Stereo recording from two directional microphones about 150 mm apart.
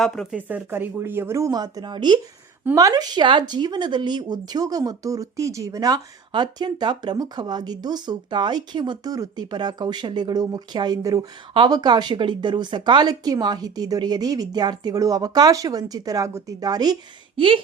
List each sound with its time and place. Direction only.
0.0 s speech: centre (ahead or behind)
0.3 s speech: 10° right (ahead or behind); by 17.6 s 35° right (ahead or behind)